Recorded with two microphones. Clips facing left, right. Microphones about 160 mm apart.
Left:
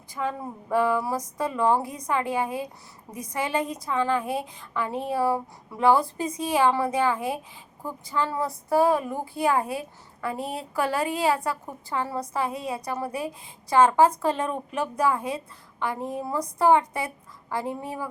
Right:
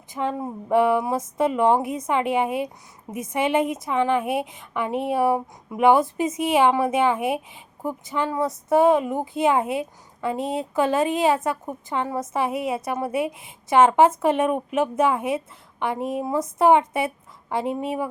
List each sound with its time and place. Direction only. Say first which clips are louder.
0.1 s a woman's voice: right 4 dB; 25° right (ahead or behind)